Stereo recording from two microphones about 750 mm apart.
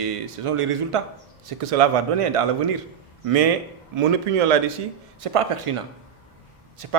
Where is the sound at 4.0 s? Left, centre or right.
Right.